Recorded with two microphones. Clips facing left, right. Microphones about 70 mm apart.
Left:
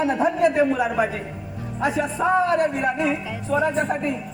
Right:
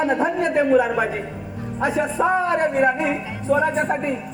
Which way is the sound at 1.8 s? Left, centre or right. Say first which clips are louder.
Right 2 dB; right.